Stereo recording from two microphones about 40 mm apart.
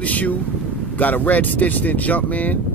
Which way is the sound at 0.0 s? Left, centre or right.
Left.